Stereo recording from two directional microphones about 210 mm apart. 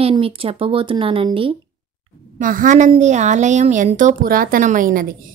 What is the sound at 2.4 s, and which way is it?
Speech, 40° right (ahead or behind).